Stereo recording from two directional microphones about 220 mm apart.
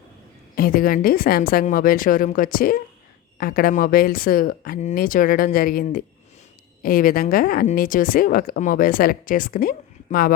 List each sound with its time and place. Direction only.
0.5 s speech: 40° left (ahead or behind)